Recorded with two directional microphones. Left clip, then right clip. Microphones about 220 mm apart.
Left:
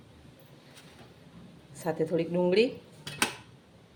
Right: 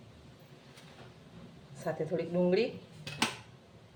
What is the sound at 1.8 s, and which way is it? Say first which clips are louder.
Speech: left 5 dB; 35° left (ahead or behind).